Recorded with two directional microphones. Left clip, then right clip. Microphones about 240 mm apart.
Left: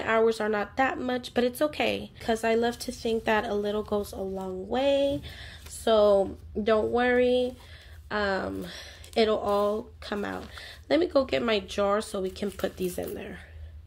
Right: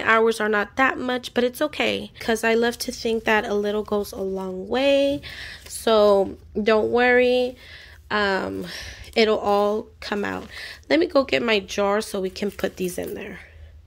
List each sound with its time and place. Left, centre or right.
0.0 s speech: right